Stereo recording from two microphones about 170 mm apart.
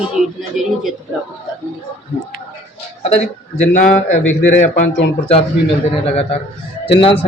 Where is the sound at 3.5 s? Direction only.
50° left (ahead or behind).